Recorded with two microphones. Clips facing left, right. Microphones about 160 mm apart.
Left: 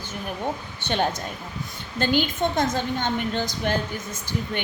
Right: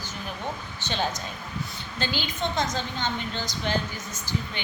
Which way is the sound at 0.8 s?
55° left (ahead or behind).